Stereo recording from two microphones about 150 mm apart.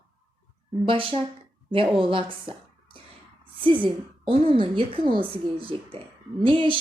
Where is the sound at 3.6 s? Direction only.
35° right (ahead or behind).